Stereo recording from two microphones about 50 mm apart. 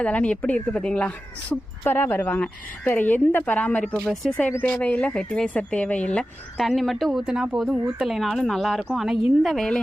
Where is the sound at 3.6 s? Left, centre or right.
Left.